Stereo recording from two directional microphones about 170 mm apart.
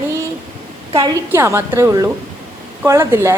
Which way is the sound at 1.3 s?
15° right (ahead or behind).